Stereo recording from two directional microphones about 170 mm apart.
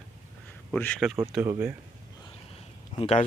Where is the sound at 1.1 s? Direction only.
10° right (ahead or behind).